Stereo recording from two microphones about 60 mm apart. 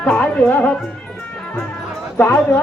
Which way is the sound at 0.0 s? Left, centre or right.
Centre.